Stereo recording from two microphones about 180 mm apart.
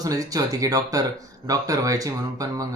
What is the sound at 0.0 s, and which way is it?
Speech, 20° right (ahead or behind).